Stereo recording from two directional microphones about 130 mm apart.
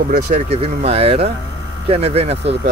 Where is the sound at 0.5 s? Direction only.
50° right (ahead or behind).